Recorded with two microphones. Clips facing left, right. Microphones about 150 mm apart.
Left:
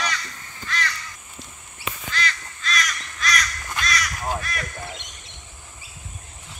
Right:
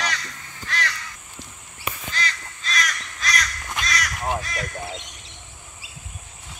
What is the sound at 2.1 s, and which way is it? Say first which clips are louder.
Crow: left 1 dB; 30° right (ahead or behind).